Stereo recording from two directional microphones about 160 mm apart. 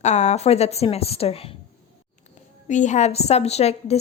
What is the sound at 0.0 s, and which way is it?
A woman's voice, 45° left (ahead or behind).